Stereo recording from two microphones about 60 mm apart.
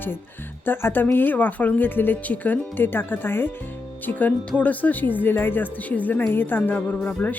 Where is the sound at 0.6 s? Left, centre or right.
Left.